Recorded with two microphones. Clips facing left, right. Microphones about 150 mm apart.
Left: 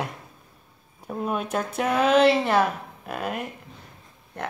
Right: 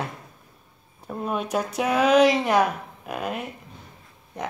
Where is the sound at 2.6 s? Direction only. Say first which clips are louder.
Right 1 dB; centre (ahead or behind).